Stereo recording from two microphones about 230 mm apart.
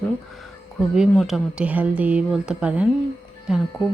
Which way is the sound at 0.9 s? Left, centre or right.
Centre.